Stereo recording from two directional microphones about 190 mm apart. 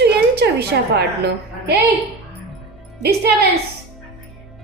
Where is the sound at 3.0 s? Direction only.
60° right (ahead or behind).